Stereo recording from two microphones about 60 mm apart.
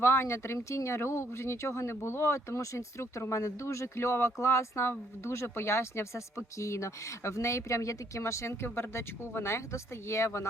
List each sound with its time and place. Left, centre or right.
0.0 s speech: left